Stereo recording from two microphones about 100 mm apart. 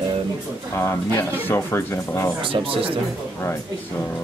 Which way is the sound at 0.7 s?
25° left (ahead or behind).